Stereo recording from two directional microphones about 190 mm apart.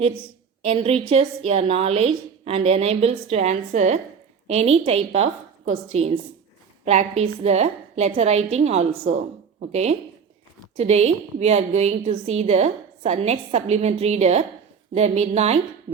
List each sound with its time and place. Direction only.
0.6 s a woman's voice: 30° right (ahead or behind)